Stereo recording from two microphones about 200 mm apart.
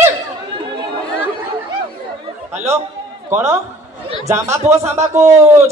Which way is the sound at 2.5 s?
10° right (ahead or behind).